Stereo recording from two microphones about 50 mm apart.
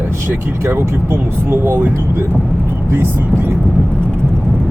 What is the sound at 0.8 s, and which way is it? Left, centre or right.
Speech, right.